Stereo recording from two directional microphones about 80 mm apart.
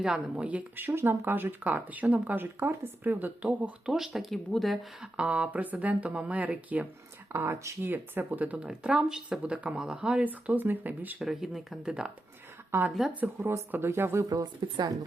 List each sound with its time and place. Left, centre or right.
0.2 s speech: centre
0.9 s speech: right
3.9 s speech: centre
5.1 s speech: centre
7.3 s speech: right
8.6 s speech: centre
11.2 s speech: centre
12.7 s speech: right
14.3 s speech: right